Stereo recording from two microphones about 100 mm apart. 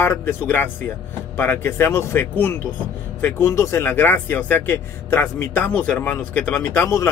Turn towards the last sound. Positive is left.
turn(degrees=30)  # may be behind; listen again after turning